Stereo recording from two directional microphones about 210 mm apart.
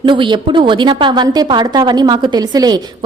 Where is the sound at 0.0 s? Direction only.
25° right (ahead or behind).